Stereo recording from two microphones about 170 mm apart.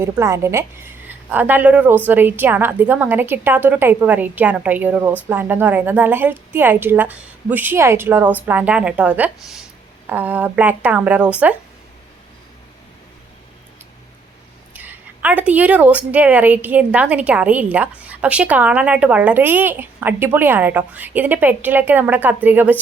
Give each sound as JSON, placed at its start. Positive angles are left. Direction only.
{"t": 0.0, "sound": "a woman's voice", "side_deg": -15}
{"t": 14.7, "sound": "a woman's voice", "side_deg": -10}